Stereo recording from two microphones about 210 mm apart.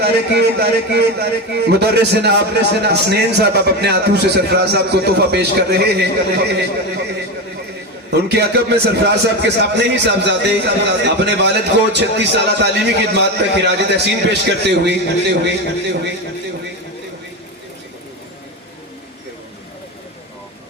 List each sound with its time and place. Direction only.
0.0 s a man's voice: 50° right (ahead or behind)
8.1 s a man's voice: 50° right (ahead or behind)